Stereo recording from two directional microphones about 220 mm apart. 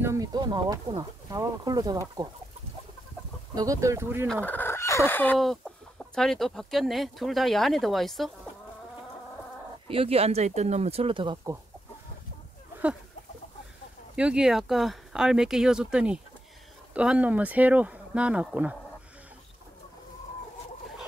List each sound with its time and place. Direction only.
0.0 s speech: 15° right (ahead or behind)
3.5 s speech: 15° right (ahead or behind)
4.3 s chicken: 5° left (ahead or behind)
9.8 s speech: 25° right (ahead or behind)
14.1 s speech: 5° right (ahead or behind)